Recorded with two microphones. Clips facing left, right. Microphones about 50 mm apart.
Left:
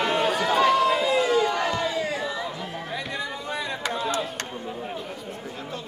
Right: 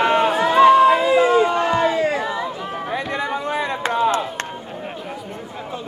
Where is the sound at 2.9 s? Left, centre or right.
Right.